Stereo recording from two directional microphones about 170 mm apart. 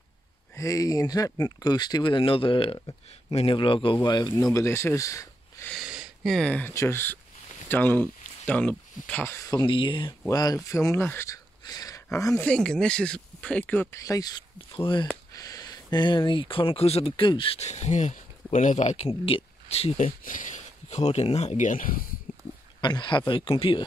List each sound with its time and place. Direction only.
0.6 s speech: 20° left (ahead or behind)
5.7 s speech: 5° right (ahead or behind); by 12.4 s 15° left (ahead or behind)
12.4 s speech: 5° left (ahead or behind); by 20.1 s 35° left (ahead or behind)
20.2 s speech: 50° left (ahead or behind)
22.3 s a sound: 55° left (ahead or behind)
22.8 s speech: 25° left (ahead or behind)